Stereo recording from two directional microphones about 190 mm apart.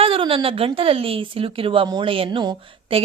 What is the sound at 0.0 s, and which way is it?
A woman's voice, 30° right (ahead or behind).